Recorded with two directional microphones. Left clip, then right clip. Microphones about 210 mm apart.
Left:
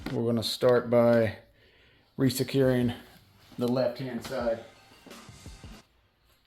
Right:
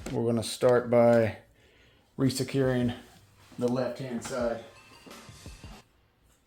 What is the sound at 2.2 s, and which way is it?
Speech, 15° left (ahead or behind).